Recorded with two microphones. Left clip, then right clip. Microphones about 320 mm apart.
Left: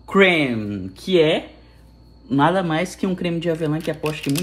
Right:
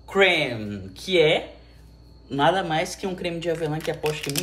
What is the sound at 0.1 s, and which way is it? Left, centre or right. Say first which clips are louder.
Speech: left 3 dB; centre.